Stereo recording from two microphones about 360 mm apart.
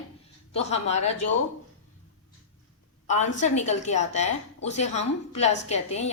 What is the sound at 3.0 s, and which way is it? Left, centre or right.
A woman's voice, centre.